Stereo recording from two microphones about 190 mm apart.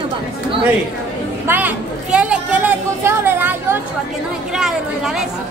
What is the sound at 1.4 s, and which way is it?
Speech, 10° right (ahead or behind).